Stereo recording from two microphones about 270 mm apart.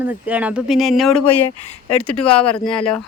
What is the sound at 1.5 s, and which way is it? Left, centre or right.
Speech, left.